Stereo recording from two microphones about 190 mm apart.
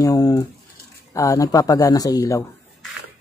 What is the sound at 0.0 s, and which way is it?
Speech, 20° left (ahead or behind).